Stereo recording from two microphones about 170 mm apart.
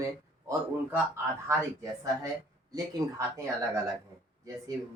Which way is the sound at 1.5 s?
20° right (ahead or behind).